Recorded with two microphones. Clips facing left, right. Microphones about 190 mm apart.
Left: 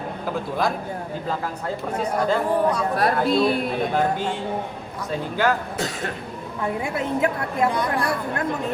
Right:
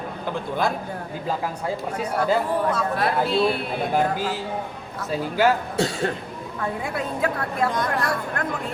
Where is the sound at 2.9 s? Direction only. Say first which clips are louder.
Left 2 dB; 40° left (ahead or behind).